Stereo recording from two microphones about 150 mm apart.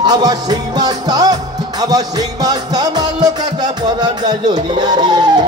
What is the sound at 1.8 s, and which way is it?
Speech, 25° right (ahead or behind).